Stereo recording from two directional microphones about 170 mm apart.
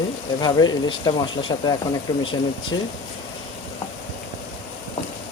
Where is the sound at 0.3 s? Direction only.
25° left (ahead or behind).